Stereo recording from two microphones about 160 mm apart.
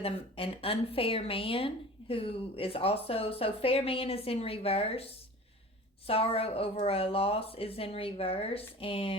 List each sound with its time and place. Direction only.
0.0 s speech: 35° left (ahead or behind)